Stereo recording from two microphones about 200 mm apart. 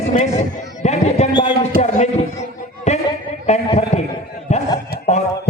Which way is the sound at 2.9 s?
35° left (ahead or behind).